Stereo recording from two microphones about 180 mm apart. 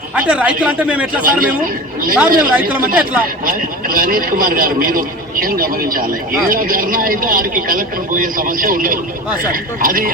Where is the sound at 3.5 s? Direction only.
50° right (ahead or behind).